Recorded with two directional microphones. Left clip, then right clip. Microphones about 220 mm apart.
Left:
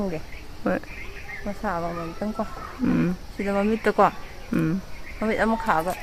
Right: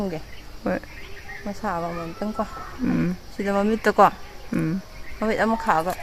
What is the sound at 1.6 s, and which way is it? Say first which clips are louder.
Speech: right 1 dB; 35° right (ahead or behind).